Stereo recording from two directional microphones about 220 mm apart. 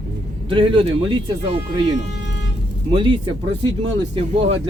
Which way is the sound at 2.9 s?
20° right (ahead or behind).